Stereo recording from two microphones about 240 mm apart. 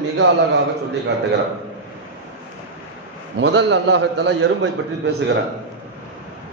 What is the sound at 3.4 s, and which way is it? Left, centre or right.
A man's voice, right.